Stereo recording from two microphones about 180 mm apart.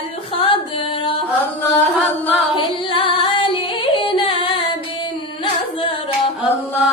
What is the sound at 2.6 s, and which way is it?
Singing, 30° left (ahead or behind).